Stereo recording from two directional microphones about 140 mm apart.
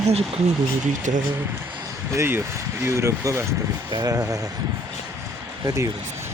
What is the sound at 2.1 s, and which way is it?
Speech, 15° right (ahead or behind).